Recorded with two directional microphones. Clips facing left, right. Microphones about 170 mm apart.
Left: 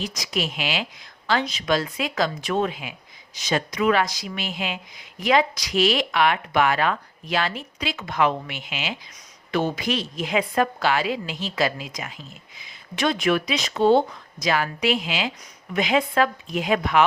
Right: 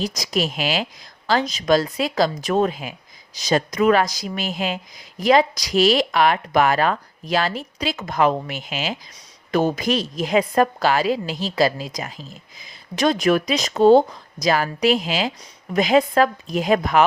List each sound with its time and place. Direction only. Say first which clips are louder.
0.0 s a woman's voice: right 5 dB; 40° right (ahead or behind)